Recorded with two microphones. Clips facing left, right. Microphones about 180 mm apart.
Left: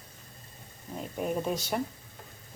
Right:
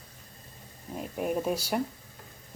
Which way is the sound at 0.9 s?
5° right (ahead or behind).